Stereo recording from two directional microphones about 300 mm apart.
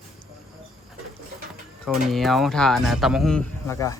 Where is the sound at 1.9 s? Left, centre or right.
Centre.